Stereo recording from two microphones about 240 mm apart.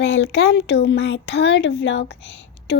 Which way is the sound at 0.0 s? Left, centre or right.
Left.